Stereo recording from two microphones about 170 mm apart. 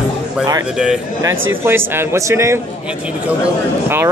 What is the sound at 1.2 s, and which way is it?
Speech, 15° right (ahead or behind).